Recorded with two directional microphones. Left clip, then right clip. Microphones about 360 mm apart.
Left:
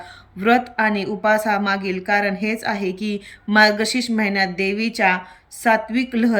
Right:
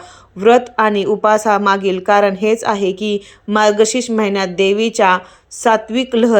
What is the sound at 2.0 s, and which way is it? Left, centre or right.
Speech, right.